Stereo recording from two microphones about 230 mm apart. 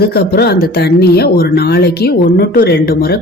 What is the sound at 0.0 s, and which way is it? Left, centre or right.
Speech, left.